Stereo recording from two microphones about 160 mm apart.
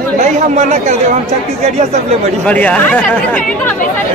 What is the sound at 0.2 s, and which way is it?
Chatter, 45° right (ahead or behind).